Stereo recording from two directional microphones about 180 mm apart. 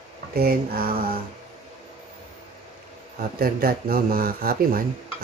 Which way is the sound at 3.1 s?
55° right (ahead or behind).